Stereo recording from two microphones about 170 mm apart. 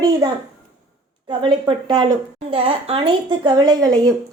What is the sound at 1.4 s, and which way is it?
A woman's voice, 30° right (ahead or behind).